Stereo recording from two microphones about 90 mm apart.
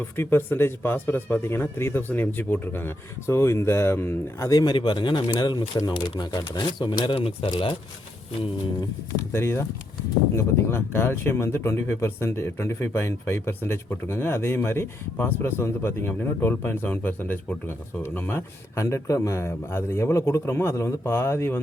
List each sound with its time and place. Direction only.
0.2 s speech: 25° left (ahead or behind)
4.4 s speech: 45° left (ahead or behind); by 7.7 s 75° left (ahead or behind)
9.3 s speech: 30° left (ahead or behind)
18.8 s a man's voice: 35° left (ahead or behind)